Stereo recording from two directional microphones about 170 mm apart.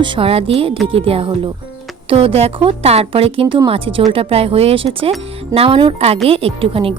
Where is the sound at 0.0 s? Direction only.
30° right (ahead or behind).